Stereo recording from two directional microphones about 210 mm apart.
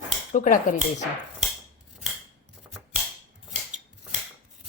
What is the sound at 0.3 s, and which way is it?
Speech, 40° left (ahead or behind).